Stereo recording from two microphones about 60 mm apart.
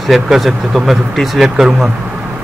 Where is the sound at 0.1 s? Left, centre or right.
Centre.